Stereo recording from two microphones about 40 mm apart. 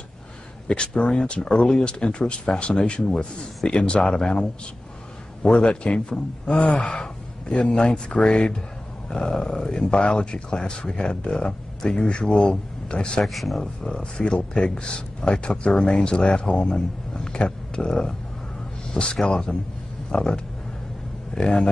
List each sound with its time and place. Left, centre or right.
0.7 s a man's voice: left
5.5 s a man's voice: left
6.5 s a man's voice: left
13.2 s speech: centre
13.6 s a man's voice: centre